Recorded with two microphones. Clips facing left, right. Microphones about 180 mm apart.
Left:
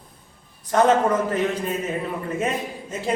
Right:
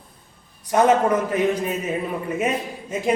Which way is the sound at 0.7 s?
10° right (ahead or behind).